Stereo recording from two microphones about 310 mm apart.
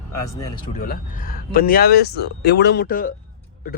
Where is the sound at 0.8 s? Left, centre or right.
Left.